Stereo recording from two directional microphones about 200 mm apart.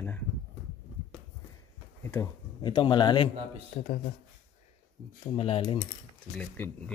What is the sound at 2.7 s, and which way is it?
Speech, 25° left (ahead or behind).